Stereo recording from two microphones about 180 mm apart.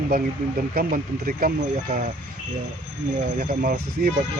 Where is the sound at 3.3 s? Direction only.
55° right (ahead or behind).